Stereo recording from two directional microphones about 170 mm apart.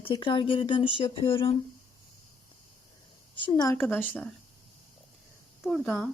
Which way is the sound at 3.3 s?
25° left (ahead or behind).